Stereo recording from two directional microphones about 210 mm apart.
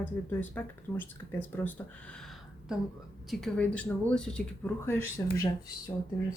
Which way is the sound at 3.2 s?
5° left (ahead or behind).